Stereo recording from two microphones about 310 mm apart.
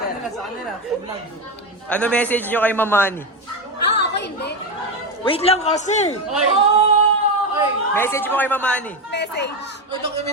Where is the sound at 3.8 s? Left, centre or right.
Left.